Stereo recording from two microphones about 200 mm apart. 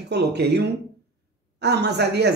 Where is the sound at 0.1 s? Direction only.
55° right (ahead or behind).